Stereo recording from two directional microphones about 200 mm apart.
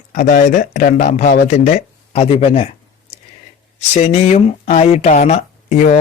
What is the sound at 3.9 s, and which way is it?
Speech, 35° left (ahead or behind).